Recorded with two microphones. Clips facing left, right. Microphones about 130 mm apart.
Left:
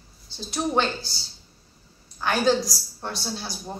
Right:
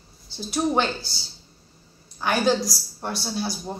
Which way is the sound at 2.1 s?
10° right (ahead or behind).